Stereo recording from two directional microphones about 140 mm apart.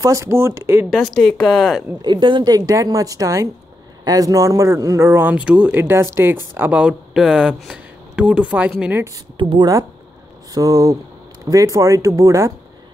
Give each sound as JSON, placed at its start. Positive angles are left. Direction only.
{"t": 0.0, "sound": "a man's voice", "side_deg": -20}
{"t": 0.8, "sound": "a woman's voice", "side_deg": 0}
{"t": 2.0, "sound": "a man's voice", "side_deg": -35}
{"t": 9.4, "sound": "speech", "side_deg": -40}
{"t": 10.5, "sound": "a man's voice", "side_deg": -25}